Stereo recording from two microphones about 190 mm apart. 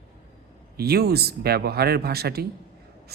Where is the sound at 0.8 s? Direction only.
55° right (ahead or behind).